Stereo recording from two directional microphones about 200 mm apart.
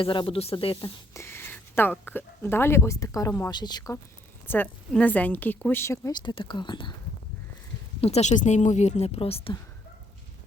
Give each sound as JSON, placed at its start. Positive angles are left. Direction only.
{"t": 0.0, "sound": "speech", "side_deg": 25}
{"t": 1.1, "sound": "speech", "side_deg": 10}
{"t": 4.4, "sound": "a woman's voice", "side_deg": 10}
{"t": 8.0, "sound": "a woman's voice", "side_deg": 35}